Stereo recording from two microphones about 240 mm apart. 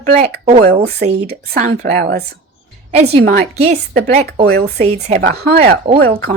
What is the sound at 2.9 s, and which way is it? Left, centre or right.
Speech, right.